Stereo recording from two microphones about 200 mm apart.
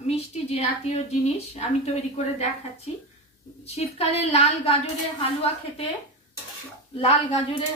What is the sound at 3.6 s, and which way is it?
A woman's voice, 30° left (ahead or behind).